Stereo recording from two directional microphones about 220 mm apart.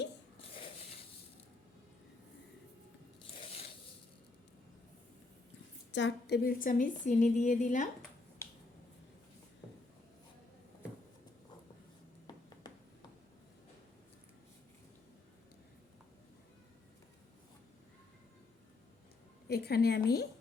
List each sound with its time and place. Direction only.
5.9 s a woman's voice: 55° left (ahead or behind); by 7.9 s 35° left (ahead or behind)
12.5 s a sound: 20° left (ahead or behind)
19.5 s a woman's voice: 45° left (ahead or behind)